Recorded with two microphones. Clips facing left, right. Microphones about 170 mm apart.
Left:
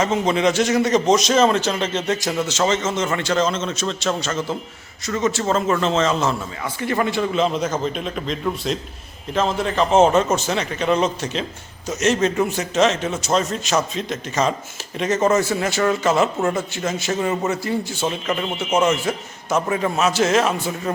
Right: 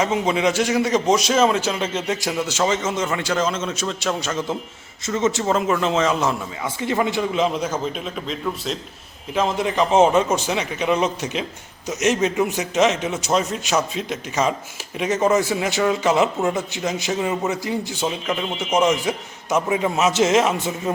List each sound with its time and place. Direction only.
0.0 s a man's voice: 10° right (ahead or behind)
9.3 s a man's voice: 15° right (ahead or behind)